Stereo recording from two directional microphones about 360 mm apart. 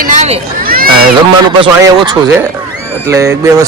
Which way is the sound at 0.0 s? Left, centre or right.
Centre.